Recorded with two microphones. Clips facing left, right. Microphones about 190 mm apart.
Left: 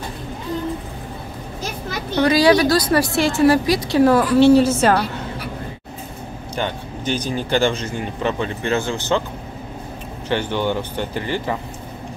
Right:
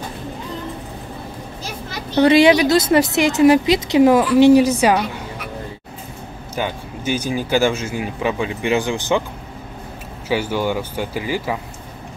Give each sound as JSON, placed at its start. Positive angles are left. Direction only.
{"t": 2.1, "sound": "speech", "side_deg": -25}
{"t": 6.5, "sound": "speech", "side_deg": -10}
{"t": 10.2, "sound": "speech", "side_deg": -5}